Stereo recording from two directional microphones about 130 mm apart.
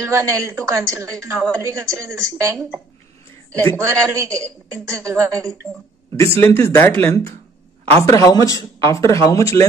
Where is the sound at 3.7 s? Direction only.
20° right (ahead or behind).